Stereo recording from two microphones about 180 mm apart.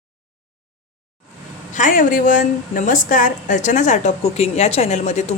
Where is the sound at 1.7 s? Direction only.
45° left (ahead or behind).